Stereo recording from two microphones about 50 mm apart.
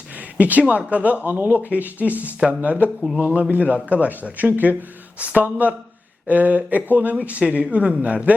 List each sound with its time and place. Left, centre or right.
0.3 s speech: right